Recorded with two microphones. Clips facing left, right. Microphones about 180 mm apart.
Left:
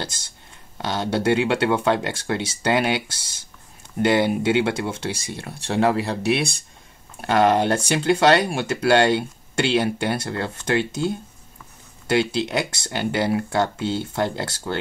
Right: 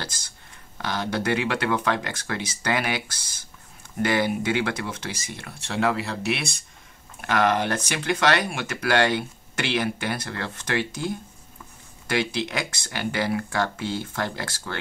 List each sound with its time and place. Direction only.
0.7 s speech: 25° left (ahead or behind)